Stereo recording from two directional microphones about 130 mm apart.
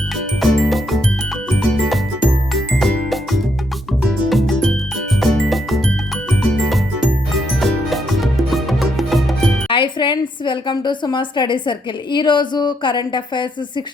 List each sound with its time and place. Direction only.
0.3 s music: centre (ahead or behind)
9.6 s a woman's voice: 40° left (ahead or behind)